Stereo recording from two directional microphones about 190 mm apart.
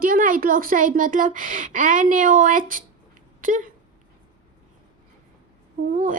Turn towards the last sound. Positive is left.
turn(degrees=-45)  # may be behind; listen again after turning